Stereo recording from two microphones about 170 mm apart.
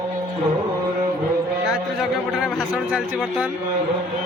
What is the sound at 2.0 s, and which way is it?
Speech, centre (ahead or behind).